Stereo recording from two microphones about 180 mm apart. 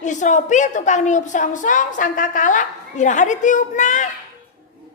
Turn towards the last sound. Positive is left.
turn(degrees=40)  # may be behind; listen again after turning